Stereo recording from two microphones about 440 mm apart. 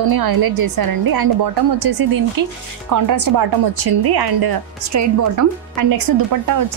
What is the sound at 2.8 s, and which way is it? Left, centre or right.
Speech, right.